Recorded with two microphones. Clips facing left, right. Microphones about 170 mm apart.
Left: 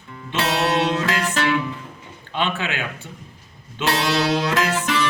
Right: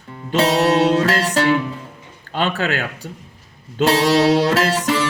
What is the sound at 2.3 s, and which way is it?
Speech, 40° right (ahead or behind).